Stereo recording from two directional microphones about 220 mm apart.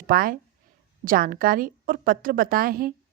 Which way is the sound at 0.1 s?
40° right (ahead or behind).